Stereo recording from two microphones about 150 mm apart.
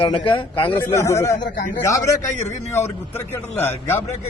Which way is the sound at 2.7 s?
15° left (ahead or behind).